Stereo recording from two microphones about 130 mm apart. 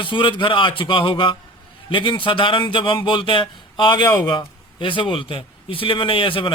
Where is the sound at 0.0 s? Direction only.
40° left (ahead or behind).